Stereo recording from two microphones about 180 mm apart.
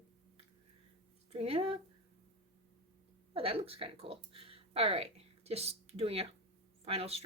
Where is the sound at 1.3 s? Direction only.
35° right (ahead or behind).